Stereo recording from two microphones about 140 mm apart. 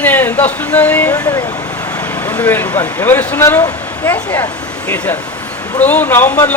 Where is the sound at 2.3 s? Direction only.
15° left (ahead or behind).